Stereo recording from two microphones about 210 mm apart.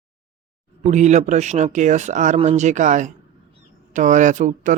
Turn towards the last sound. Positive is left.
turn(degrees=-35)  # may be behind; listen again after turning